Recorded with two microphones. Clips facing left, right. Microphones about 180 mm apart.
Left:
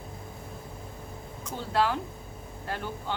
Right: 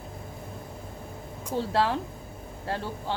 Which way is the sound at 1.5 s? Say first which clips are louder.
Right 2 dB; 30° right (ahead or behind).